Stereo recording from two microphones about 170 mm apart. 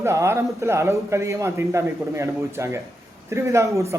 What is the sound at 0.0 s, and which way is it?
A man's voice, 15° right (ahead or behind).